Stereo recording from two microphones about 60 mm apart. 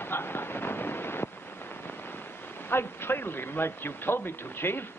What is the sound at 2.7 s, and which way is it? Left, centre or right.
A man's voice, left.